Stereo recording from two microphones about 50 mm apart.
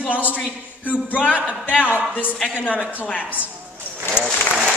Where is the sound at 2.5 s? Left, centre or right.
Left.